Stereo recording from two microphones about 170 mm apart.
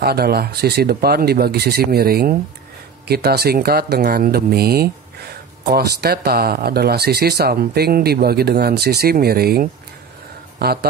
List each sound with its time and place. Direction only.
0.0 s speech: 65° right (ahead or behind)